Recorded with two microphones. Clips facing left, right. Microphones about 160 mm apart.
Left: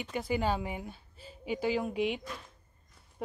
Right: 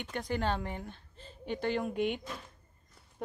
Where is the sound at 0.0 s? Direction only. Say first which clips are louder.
Left 2 dB; 5° left (ahead or behind).